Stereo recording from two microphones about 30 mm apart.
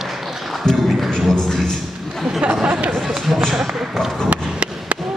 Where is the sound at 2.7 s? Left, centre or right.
Right.